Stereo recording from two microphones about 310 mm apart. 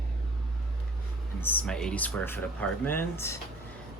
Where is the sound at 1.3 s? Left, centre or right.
Centre.